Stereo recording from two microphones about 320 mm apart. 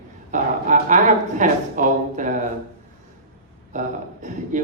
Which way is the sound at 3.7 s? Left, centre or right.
Right.